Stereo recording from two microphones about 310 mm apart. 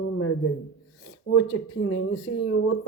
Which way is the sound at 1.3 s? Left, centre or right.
Left.